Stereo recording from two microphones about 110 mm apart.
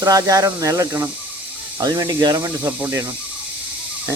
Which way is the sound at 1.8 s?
40° right (ahead or behind).